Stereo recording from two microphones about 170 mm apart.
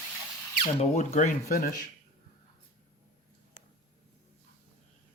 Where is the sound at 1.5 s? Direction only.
60° left (ahead or behind).